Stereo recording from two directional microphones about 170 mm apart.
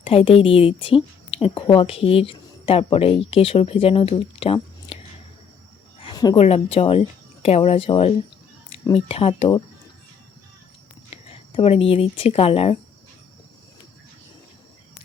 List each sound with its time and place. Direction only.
0.0 s a woman's voice: 35° left (ahead or behind)
6.0 s cricket: 25° left (ahead or behind)
6.3 s a woman's voice: 35° left (ahead or behind)
11.1 s speech: 35° left (ahead or behind)